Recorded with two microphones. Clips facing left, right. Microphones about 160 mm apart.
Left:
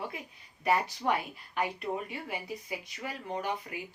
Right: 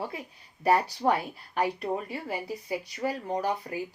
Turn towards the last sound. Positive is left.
turn(degrees=-35)  # may be behind; listen again after turning